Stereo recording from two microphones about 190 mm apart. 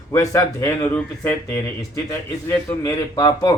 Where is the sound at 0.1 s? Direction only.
15° left (ahead or behind).